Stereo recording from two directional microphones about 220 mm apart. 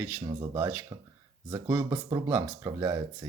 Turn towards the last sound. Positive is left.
turn(degrees=-15)  # may be behind; listen again after turning